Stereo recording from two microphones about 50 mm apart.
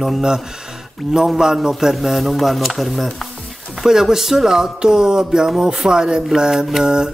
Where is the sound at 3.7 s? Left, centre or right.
Centre.